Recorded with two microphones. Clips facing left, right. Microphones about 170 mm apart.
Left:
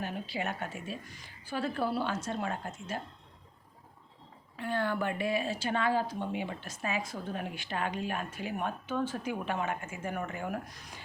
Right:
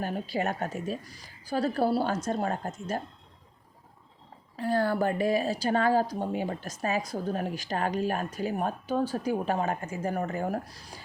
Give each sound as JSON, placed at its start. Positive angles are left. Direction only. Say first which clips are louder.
{"t": 0.0, "sound": "speech", "louder": "right 6 dB", "side_deg": -40}
{"t": 4.5, "sound": "speech", "louder": "right 6 dB", "side_deg": -35}